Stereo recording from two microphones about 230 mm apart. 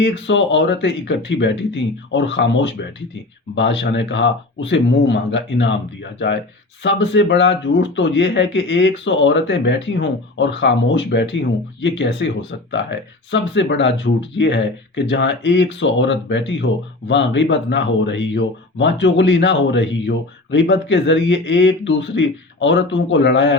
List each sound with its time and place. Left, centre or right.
0.0 s speech: left